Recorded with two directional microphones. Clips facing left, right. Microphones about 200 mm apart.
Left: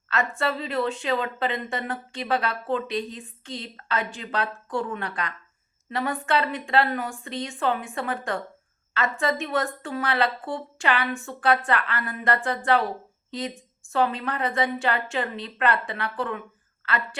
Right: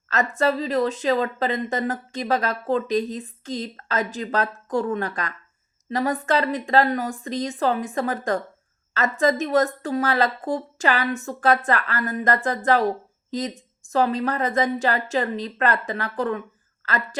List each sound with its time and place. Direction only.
0.1 s a woman's voice: 40° right (ahead or behind)